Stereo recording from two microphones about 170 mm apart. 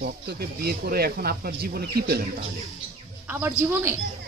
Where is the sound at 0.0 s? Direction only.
65° right (ahead or behind).